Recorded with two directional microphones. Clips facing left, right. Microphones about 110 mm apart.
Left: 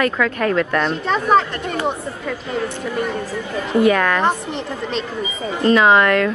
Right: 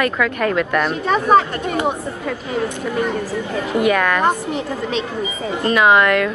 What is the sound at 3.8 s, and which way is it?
A woman's voice, 5° right (ahead or behind).